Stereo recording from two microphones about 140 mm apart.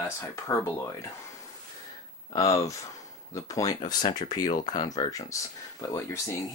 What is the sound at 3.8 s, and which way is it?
Speech, 35° left (ahead or behind).